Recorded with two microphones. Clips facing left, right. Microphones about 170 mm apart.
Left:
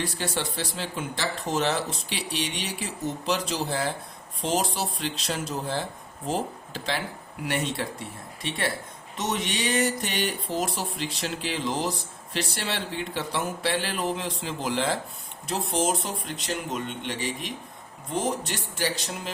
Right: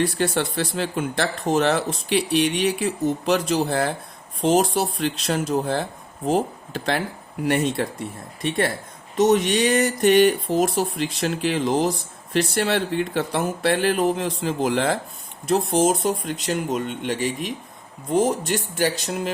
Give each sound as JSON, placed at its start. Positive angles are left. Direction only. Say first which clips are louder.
{"t": 0.0, "sound": "speech", "louder": "right 8 dB", "side_deg": -55}